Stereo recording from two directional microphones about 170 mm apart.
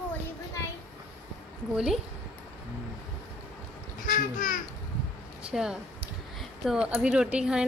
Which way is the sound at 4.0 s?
55° left (ahead or behind).